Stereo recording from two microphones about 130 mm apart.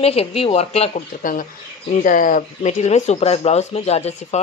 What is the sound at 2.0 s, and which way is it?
Speech, 90° left.